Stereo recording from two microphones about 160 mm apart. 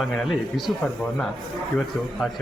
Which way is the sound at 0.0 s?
Centre (ahead or behind).